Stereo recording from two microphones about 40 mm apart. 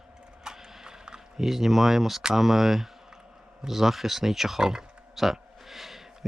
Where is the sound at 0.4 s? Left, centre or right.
Centre.